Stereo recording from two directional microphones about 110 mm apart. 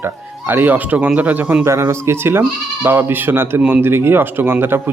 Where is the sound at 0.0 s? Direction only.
20° right (ahead or behind).